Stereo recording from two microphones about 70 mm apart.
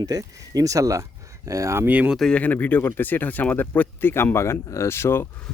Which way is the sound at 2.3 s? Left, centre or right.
Left.